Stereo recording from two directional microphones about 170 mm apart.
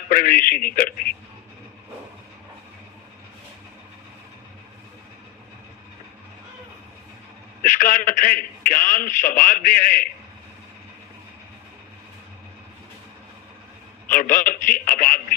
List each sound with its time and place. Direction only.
0.1 s speech: 55° left (ahead or behind)
7.6 s a man's voice: 50° left (ahead or behind)
14.1 s a man's voice: 55° left (ahead or behind)